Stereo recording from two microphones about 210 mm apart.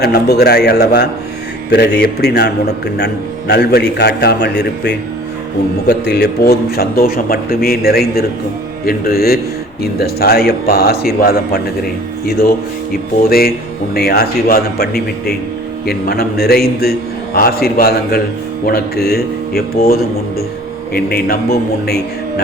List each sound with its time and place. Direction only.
0.0 s a man's voice: 50° left (ahead or behind)
13.2 s a man's voice: 45° left (ahead or behind)